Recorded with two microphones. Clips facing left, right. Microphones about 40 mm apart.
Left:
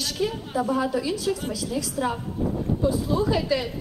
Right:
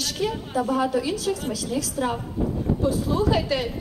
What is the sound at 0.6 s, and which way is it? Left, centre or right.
Speech, right.